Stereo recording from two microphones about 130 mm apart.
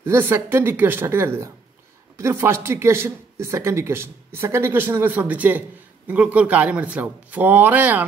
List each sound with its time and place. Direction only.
0.0 s a man's voice: 15° right (ahead or behind)